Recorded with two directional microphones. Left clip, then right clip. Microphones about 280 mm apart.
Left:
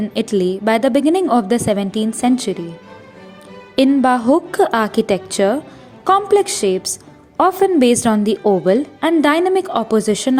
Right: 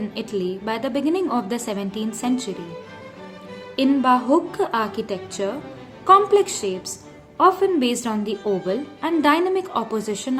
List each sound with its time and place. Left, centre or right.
0.0 s a woman's voice: left
3.8 s a woman's voice: left